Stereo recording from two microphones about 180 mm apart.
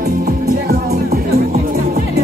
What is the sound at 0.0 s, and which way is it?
Music, 60° right (ahead or behind).